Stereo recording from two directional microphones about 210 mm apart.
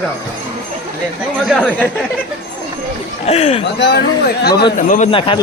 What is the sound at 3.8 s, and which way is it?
Speech, 50° left (ahead or behind).